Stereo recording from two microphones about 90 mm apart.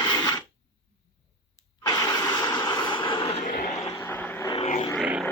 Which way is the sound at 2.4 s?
55° left (ahead or behind).